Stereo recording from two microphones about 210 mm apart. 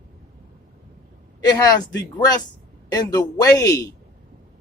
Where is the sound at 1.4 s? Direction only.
20° left (ahead or behind).